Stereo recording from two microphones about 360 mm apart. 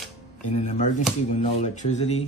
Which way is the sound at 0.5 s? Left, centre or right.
Centre.